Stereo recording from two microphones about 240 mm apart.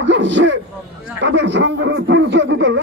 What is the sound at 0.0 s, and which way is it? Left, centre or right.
Speech, right.